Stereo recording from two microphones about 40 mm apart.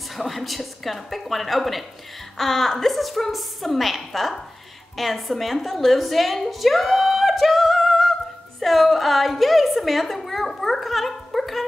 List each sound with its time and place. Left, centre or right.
0.1 s a woman's voice: centre